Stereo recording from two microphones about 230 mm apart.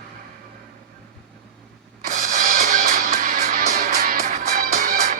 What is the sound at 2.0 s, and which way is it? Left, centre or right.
Music, right.